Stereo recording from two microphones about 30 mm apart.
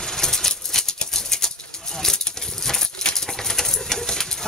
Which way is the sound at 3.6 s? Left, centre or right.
Centre.